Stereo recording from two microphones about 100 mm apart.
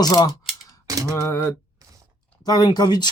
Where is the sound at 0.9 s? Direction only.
35° right (ahead or behind).